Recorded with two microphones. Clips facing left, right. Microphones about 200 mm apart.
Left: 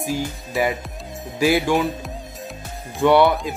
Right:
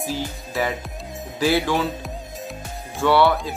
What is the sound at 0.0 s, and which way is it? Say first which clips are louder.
Music: left 2 dB; 15° left (ahead or behind).